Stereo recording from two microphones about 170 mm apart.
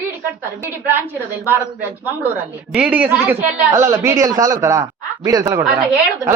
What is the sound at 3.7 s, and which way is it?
A man's voice, 20° right (ahead or behind).